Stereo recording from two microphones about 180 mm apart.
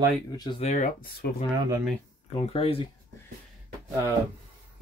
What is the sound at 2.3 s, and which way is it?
Speech, 35° left (ahead or behind).